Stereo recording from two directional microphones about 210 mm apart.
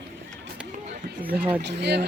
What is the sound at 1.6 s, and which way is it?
Speech, 55° right (ahead or behind).